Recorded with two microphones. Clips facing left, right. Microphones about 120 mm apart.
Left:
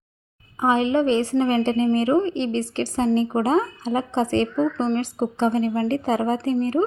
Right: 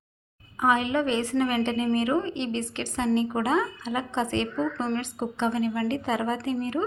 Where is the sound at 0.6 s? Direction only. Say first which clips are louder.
Left 4 dB; 30° left (ahead or behind).